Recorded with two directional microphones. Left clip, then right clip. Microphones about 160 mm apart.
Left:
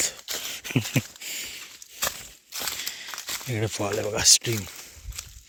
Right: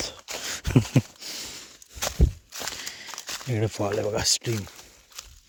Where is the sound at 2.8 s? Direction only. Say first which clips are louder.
Left 3 dB; 25° right (ahead or behind).